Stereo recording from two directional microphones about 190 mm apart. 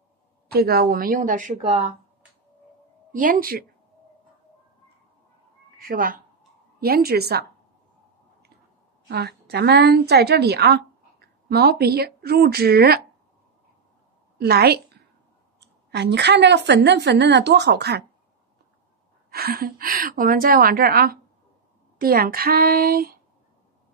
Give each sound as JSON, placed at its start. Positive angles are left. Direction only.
{"t": 0.5, "sound": "a woman's voice", "side_deg": -55}
{"t": 3.1, "sound": "a woman's voice", "side_deg": -45}
{"t": 5.8, "sound": "a woman's voice", "side_deg": -50}
{"t": 9.1, "sound": "a woman's voice", "side_deg": -60}
{"t": 14.4, "sound": "a woman's voice", "side_deg": -55}
{"t": 19.3, "sound": "a woman's voice", "side_deg": -55}